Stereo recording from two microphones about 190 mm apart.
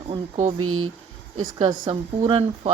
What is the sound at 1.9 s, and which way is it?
Speech, 25° right (ahead or behind).